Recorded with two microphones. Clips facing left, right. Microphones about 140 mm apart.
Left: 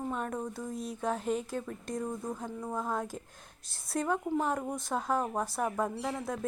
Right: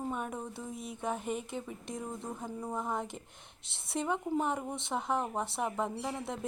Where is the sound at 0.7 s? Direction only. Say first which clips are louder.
Left 4 dB; 55° right (ahead or behind).